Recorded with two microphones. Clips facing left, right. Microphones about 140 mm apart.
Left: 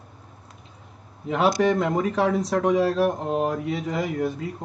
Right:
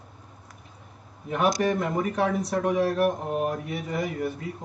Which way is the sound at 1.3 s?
85° left.